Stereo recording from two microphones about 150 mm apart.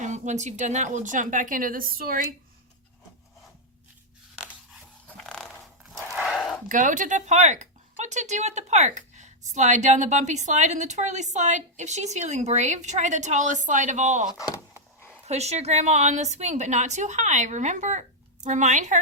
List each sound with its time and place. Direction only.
0.0 s speech: 50° right (ahead or behind); by 2.2 s 75° right (ahead or behind)
4.4 s a sound: 5° right (ahead or behind)
5.0 s dog: 5° left (ahead or behind)
6.1 s a sound: 5° right (ahead or behind)
6.7 s speech: 60° right (ahead or behind)
14.3 s speech: 20° left (ahead or behind)
15.3 s speech: 45° right (ahead or behind)